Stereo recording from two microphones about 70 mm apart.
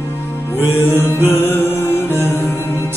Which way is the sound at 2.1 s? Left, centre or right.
Right.